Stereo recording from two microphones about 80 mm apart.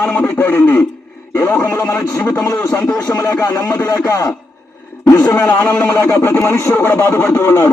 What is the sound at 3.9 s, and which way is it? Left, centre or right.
Speech, left.